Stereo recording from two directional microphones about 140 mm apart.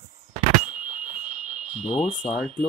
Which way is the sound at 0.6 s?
65° right (ahead or behind).